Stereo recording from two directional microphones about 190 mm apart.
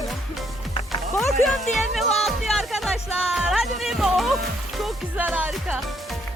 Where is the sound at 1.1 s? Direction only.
Centre (ahead or behind).